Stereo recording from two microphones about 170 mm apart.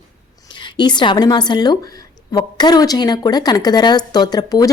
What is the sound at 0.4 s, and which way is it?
A woman's voice, 30° left (ahead or behind).